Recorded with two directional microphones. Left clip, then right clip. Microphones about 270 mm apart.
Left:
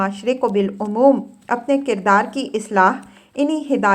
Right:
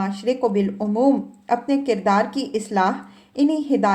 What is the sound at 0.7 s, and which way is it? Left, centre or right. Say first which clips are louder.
Speech: left 5 dB; centre.